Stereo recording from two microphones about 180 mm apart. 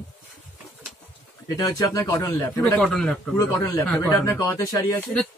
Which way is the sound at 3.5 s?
20° left (ahead or behind).